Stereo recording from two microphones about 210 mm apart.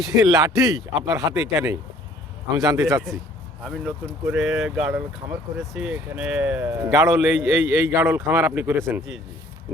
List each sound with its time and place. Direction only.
0.2 s speech: 15° right (ahead or behind)
3.1 s speech: centre (ahead or behind)
9.0 s speech: centre (ahead or behind)